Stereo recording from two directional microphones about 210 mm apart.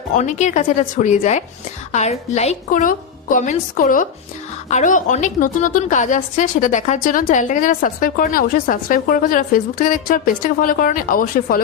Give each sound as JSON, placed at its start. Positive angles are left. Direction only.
{"t": 0.1, "sound": "a woman's voice", "side_deg": 35}